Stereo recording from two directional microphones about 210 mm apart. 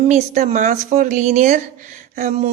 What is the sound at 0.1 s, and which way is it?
A woman's voice, 35° right (ahead or behind).